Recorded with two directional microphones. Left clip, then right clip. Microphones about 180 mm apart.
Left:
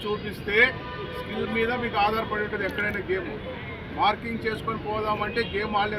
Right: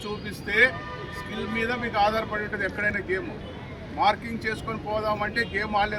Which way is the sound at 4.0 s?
10° right (ahead or behind).